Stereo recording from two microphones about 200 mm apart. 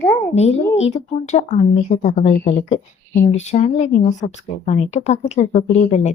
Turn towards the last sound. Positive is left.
turn(degrees=35)  # may be behind; listen again after turning